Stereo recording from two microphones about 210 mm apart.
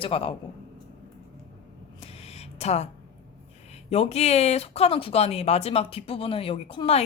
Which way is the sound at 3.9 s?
30° left (ahead or behind).